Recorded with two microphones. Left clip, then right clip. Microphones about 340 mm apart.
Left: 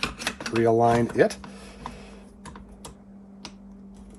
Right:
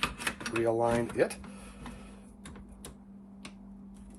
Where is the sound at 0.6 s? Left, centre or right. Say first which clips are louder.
Left 8 dB; left.